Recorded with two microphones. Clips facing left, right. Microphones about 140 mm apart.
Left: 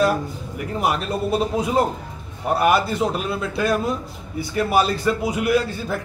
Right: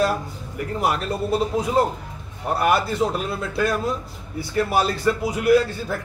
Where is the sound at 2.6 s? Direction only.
20° left (ahead or behind).